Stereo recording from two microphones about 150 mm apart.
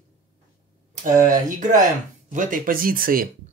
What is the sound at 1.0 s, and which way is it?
Speech, 60° right (ahead or behind).